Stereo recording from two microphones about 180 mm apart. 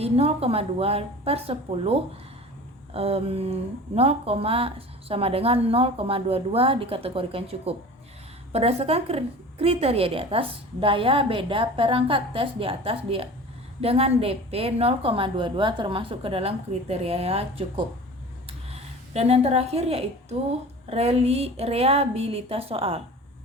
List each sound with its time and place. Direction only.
0.0 s speech: 35° right (ahead or behind)